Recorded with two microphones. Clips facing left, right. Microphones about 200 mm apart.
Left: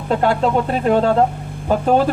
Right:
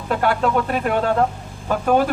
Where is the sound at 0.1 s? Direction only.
25° left (ahead or behind).